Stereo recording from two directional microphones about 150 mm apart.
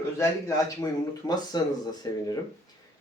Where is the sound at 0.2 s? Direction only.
20° left (ahead or behind).